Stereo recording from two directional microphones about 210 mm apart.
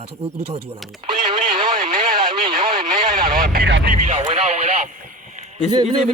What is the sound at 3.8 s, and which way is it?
Speech, 35° right (ahead or behind).